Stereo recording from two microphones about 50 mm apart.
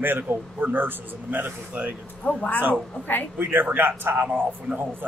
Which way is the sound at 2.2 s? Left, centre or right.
Left.